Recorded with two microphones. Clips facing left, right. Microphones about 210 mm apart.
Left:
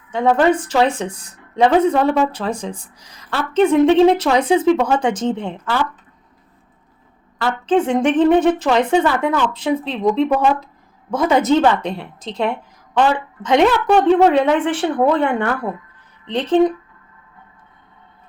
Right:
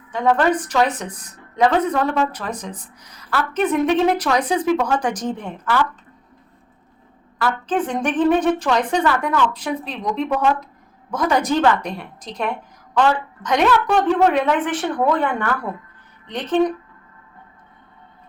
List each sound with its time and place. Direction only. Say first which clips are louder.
0.1 s a woman's voice: left 3 dB; 25° left (ahead or behind)
7.4 s a woman's voice: left 5 dB; 25° left (ahead or behind)